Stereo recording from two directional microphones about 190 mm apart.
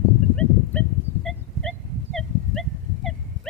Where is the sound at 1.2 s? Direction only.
Centre (ahead or behind).